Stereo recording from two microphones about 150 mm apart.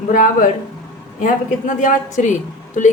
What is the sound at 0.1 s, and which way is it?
A woman's voice, 65° left (ahead or behind).